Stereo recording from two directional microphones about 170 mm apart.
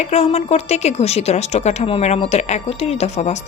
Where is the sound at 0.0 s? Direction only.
40° left (ahead or behind).